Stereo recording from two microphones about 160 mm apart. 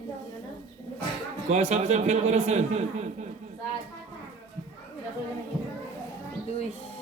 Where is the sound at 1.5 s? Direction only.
45° right (ahead or behind).